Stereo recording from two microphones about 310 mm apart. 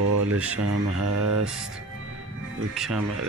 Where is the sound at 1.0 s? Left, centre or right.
Right.